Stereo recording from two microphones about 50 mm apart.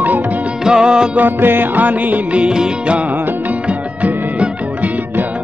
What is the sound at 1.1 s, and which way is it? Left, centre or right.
Music, right.